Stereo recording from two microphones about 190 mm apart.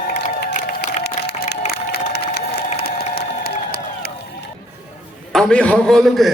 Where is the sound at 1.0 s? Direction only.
60° left (ahead or behind).